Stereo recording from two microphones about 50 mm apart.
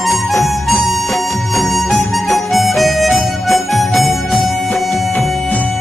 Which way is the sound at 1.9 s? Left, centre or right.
Left.